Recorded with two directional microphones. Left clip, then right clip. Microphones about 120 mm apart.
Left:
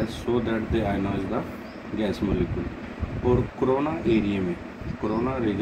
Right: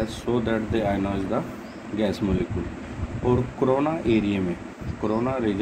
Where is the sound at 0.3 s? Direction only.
40° right (ahead or behind).